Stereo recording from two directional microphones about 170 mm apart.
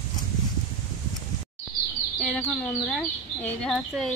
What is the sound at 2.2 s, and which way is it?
A woman's voice, 5° left (ahead or behind).